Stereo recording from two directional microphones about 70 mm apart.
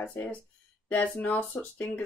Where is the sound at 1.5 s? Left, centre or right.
Left.